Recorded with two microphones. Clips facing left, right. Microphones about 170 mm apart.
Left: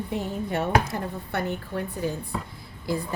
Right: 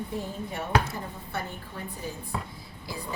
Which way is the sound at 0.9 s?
70° left (ahead or behind).